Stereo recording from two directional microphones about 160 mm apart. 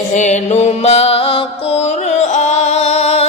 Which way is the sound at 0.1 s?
50° left (ahead or behind).